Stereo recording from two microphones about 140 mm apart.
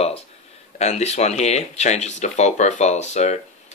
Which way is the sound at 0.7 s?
50° left (ahead or behind).